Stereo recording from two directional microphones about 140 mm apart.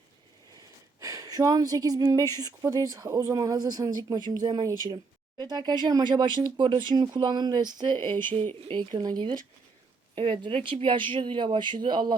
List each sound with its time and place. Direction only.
0.5 s speech: 25° right (ahead or behind)
8.0 s speech: 15° left (ahead or behind)
8.6 s speech: 35° right (ahead or behind)